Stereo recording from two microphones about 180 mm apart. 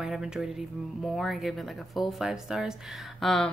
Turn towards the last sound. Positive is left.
turn(degrees=0)  # may be behind; listen again after turning